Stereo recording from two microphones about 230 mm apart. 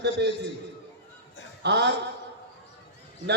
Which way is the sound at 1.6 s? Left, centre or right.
Right.